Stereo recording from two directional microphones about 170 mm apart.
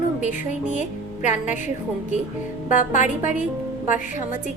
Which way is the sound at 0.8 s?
45° left (ahead or behind).